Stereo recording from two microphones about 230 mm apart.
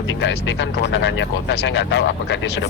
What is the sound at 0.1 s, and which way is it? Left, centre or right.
Speech, left.